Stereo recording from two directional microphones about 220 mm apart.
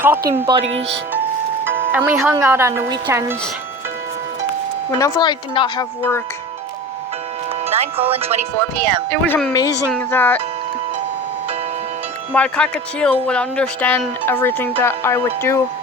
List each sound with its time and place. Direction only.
0.3 s a woman's voice: 15° right (ahead or behind)
0.6 s speech: 60° right (ahead or behind)
1.6 s music: 10° right (ahead or behind)
2.3 s a woman's voice: 10° right (ahead or behind)
4.9 s a woman's voice: 15° left (ahead or behind)
7.6 s speech: 25° right (ahead or behind)
8.5 s speech: 10° left (ahead or behind)
12.3 s speech: 5° left (ahead or behind)